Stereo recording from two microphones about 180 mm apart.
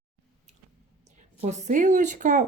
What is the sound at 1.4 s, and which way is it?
A woman's voice, 40° right (ahead or behind).